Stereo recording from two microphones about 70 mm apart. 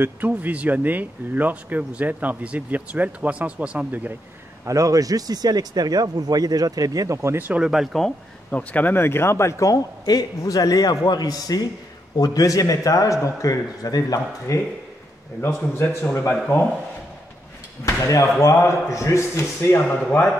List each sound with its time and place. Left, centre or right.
0.3 s speech: centre
4.6 s speech: right
7.3 s speech: right
7.6 s speech: centre
8.5 s speech: left
8.9 s a man's voice: left
10.0 s a man's voice: left
14.5 s speech: left
15.4 s a man's voice: left
17.8 s speech: left